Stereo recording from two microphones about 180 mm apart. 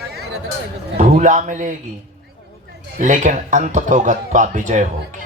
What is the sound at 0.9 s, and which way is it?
Speech, 50° right (ahead or behind).